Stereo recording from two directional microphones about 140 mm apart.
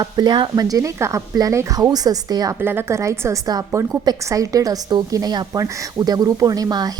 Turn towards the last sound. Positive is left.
turn(degrees=-30)  # may be behind; listen again after turning